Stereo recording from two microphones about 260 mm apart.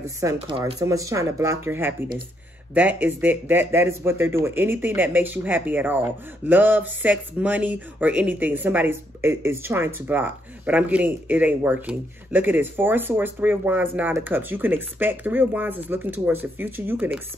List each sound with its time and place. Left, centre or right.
0.0 s speech: centre